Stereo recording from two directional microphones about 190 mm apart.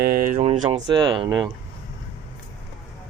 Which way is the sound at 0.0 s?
50° right (ahead or behind).